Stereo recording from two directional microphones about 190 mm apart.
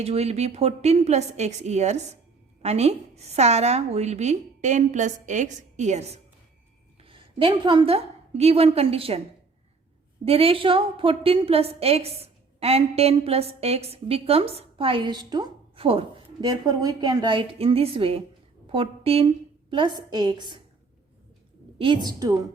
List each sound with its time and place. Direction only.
0.0 s a woman's voice: 35° right (ahead or behind)
10.2 s a woman's voice: 30° right (ahead or behind)
21.8 s a woman's voice: 25° right (ahead or behind)